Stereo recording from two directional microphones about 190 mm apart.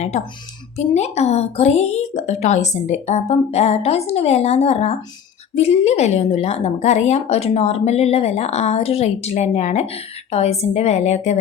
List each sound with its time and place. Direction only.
0.8 s speech: 35° left (ahead or behind)